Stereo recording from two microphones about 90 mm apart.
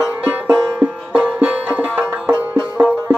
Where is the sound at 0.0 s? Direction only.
15° right (ahead or behind).